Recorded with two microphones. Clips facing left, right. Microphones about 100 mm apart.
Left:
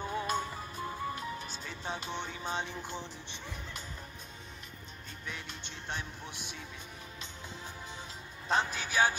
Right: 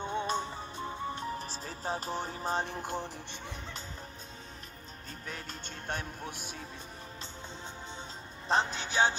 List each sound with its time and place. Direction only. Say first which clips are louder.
0.0 s music: right 1 dB; 25° right (ahead or behind)
1.2 s speech: right 3 dB; 35° right (ahead or behind)
5.2 s music: right 1 dB; 40° right (ahead or behind)
8.5 s speech: right 2 dB; 30° right (ahead or behind)